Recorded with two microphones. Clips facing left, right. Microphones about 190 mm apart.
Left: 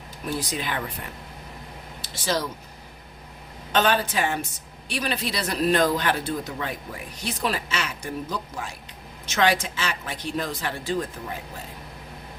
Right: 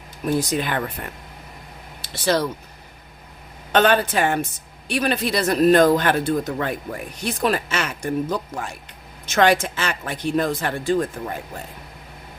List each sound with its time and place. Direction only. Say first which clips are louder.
0.3 s a man's voice: right 6 dB; 55° right (ahead or behind)
2.0 s speech: right 6 dB; 60° right (ahead or behind)
3.7 s a woman's voice: right 5 dB; 60° right (ahead or behind)